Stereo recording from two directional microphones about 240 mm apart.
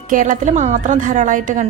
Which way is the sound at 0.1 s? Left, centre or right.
Right.